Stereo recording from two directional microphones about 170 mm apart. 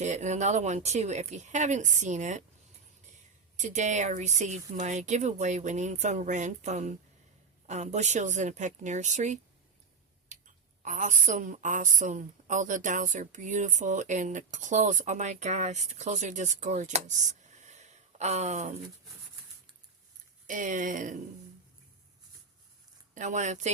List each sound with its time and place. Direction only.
0.0 s a woman's voice: 45° right (ahead or behind)
3.6 s a woman's voice: 45° right (ahead or behind)
10.3 s clicking: 45° right (ahead or behind)
10.8 s a woman's voice: 50° right (ahead or behind)
20.5 s a woman's voice: 50° right (ahead or behind)
23.1 s a woman's voice: 45° right (ahead or behind)